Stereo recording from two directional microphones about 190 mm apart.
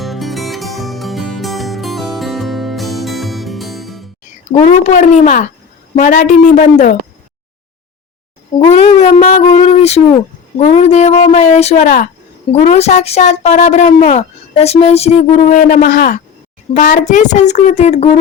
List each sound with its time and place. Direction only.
0.0 s music: centre (ahead or behind)
4.6 s a woman's voice: 35° left (ahead or behind)
8.5 s a woman's voice: 30° left (ahead or behind)